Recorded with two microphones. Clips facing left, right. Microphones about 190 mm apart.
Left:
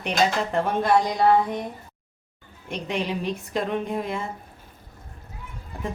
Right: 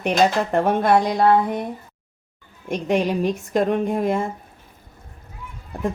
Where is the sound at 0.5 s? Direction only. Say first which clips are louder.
Right 4 dB; 55° right (ahead or behind).